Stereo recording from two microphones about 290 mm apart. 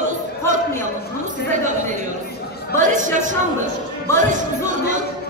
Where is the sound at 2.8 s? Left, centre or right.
Right.